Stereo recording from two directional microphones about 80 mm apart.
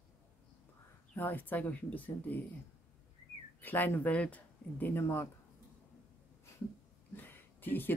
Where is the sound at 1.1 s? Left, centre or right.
Left.